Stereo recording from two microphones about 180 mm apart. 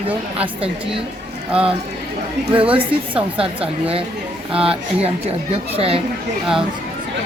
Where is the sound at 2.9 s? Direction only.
30° right (ahead or behind).